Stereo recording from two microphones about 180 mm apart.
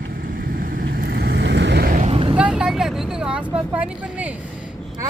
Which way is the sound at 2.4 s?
5° right (ahead or behind).